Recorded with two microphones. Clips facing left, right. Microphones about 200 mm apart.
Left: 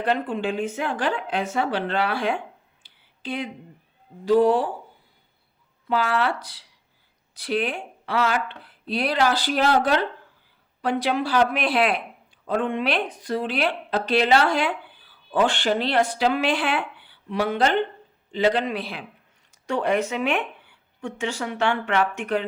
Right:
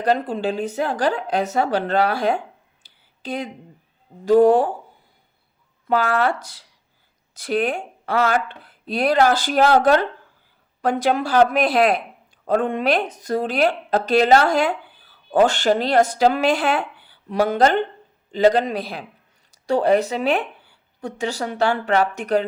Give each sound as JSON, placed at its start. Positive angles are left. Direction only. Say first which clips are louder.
{"t": 0.0, "sound": "a woman's voice", "louder": "right 3 dB", "side_deg": -40}
{"t": 2.8, "sound": "a sound", "louder": "right 1 dB", "side_deg": -40}
{"t": 4.3, "sound": "speech", "louder": "right 4 dB", "side_deg": -45}
{"t": 5.9, "sound": "a woman's voice", "louder": "right 4 dB", "side_deg": -45}